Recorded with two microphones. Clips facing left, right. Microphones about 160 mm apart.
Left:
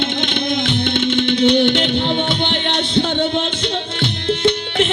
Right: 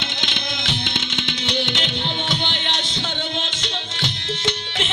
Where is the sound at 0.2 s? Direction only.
55° left (ahead or behind).